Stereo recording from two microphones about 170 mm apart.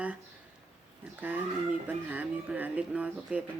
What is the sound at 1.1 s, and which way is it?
Speech, 10° right (ahead or behind).